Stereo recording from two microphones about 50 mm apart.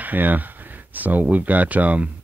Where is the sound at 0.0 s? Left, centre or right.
Right.